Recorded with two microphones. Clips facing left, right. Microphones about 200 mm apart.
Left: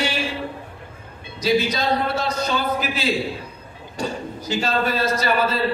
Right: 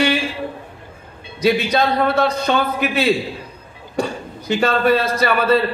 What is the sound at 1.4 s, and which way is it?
A man's voice, 60° right (ahead or behind).